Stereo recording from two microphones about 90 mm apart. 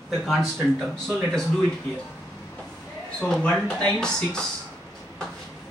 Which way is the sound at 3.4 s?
10° left (ahead or behind).